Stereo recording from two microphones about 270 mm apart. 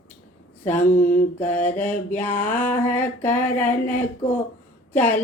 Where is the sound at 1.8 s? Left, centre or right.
Centre.